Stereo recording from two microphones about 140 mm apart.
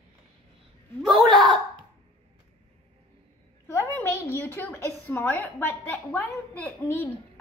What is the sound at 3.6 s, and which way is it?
A woman's voice, 20° left (ahead or behind).